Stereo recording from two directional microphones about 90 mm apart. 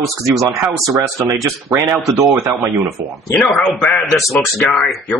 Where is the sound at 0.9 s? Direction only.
30° right (ahead or behind).